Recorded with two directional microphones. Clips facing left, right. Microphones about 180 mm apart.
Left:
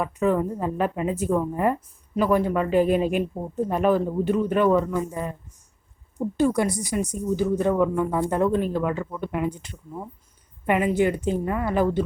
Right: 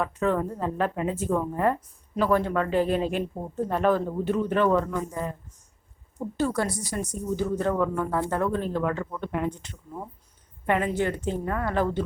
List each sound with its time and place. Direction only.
0.0 s a woman's voice: 10° left (ahead or behind)